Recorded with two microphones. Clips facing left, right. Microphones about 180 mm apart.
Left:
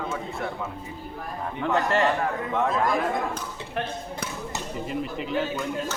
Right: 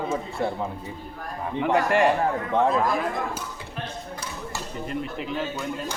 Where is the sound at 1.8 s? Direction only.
20° right (ahead or behind).